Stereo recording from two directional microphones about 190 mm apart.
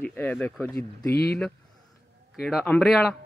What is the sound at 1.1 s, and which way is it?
Speech, 55° left (ahead or behind).